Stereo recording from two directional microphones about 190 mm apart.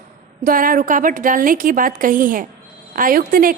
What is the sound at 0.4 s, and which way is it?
A woman's voice, 45° right (ahead or behind).